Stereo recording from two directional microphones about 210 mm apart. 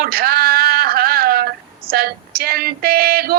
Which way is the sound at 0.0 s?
45° right (ahead or behind).